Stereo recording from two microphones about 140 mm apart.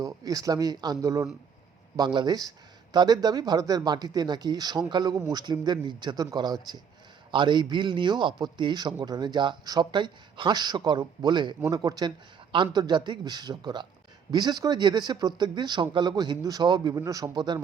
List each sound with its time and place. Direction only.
0.0 s a man's voice: 25° right (ahead or behind)